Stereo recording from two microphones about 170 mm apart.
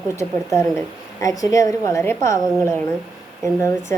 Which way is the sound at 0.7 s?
20° left (ahead or behind).